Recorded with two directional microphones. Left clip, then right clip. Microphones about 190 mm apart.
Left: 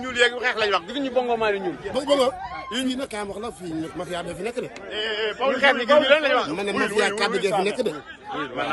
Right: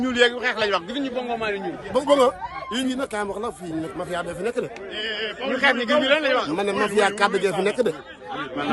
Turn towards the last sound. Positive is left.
turn(degrees=-15)  # may be behind; listen again after turning